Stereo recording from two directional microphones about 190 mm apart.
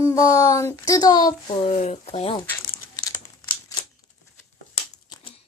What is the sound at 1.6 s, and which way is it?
Speech, 35° left (ahead or behind).